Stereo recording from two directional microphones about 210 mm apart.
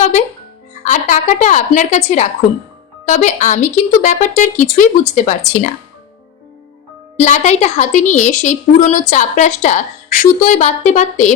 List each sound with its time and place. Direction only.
0.9 s a woman's voice: 35° left (ahead or behind)
7.2 s a woman's voice: 35° left (ahead or behind)